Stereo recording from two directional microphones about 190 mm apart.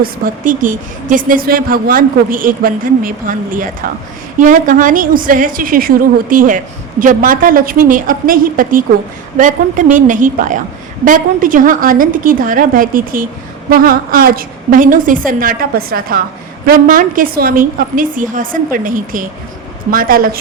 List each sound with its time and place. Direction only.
0.0 s a woman's voice: 45° right (ahead or behind)